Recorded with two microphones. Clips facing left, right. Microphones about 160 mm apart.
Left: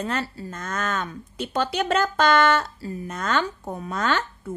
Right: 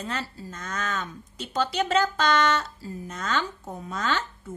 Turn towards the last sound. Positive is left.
turn(degrees=60)  # may be behind; listen again after turning